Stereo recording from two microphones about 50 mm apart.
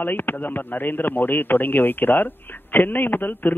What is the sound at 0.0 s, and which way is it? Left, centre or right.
A man's voice, left.